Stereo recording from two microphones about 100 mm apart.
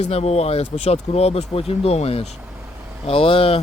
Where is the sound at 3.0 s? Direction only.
65° left (ahead or behind).